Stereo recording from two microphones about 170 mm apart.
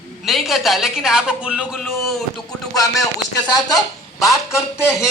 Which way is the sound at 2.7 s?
20° left (ahead or behind).